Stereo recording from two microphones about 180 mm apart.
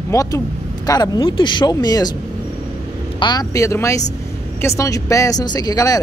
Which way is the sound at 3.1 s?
25° left (ahead or behind).